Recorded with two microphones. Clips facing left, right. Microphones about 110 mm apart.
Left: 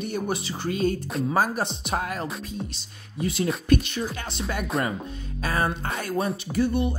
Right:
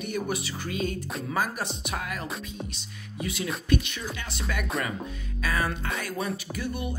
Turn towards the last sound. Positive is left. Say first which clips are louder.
# left 8 dB
turn(degrees=30)  # may be behind; listen again after turning